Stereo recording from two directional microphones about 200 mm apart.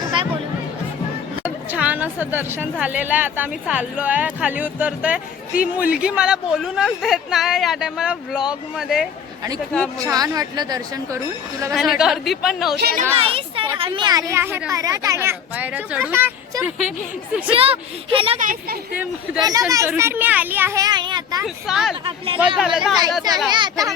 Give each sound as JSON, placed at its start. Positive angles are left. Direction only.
{"t": 1.5, "sound": "a woman's voice", "side_deg": -5}
{"t": 10.0, "sound": "a woman's voice", "side_deg": -15}
{"t": 11.7, "sound": "speech", "side_deg": 0}
{"t": 12.7, "sound": "speech", "side_deg": -50}
{"t": 13.1, "sound": "speech", "side_deg": -25}
{"t": 17.5, "sound": "a woman's voice", "side_deg": -30}
{"t": 18.3, "sound": "speech", "side_deg": -40}
{"t": 19.5, "sound": "a woman's voice", "side_deg": -15}
{"t": 21.4, "sound": "speech", "side_deg": 0}
{"t": 23.5, "sound": "a woman's voice", "side_deg": -20}